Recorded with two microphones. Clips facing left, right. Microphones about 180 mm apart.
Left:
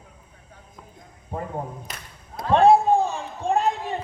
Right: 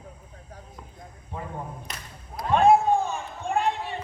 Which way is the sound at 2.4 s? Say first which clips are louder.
Left 3 dB; 35° left (ahead or behind).